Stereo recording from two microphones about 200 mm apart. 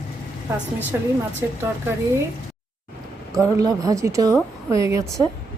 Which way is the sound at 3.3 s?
15° right (ahead or behind).